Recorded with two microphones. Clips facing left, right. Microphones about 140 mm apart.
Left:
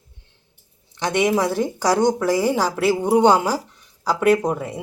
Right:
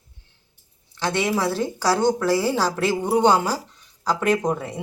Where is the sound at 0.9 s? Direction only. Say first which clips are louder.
Left 4 dB; 15° left (ahead or behind).